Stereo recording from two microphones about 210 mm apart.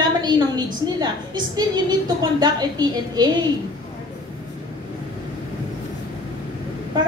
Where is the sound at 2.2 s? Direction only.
20° right (ahead or behind).